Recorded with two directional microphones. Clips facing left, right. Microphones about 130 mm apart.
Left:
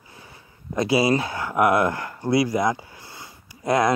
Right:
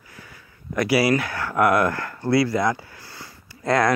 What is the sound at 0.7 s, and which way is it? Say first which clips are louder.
Speech: even; 25° left (ahead or behind).